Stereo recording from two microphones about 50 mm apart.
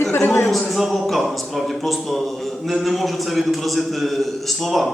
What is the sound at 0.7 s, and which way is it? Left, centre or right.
A man's voice, centre.